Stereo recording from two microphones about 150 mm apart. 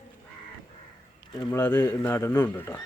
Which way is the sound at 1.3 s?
25° left (ahead or behind).